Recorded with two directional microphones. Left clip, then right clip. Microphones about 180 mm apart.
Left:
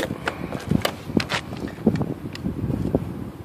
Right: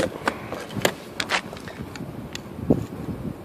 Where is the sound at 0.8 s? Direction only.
25° right (ahead or behind).